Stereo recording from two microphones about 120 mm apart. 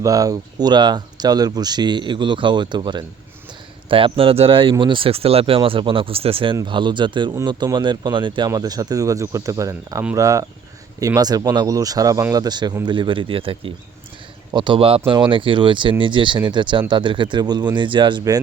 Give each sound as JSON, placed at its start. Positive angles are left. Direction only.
{"t": 0.0, "sound": "speech", "side_deg": -30}